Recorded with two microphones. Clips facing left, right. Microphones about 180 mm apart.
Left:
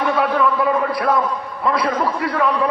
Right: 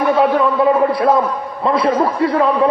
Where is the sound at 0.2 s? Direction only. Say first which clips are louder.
Right 4 dB; 25° right (ahead or behind).